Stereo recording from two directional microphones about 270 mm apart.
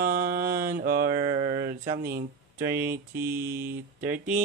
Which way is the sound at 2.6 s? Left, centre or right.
Centre.